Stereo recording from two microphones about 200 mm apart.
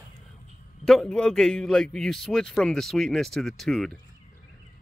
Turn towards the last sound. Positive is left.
turn(degrees=0)  # may be behind; listen again after turning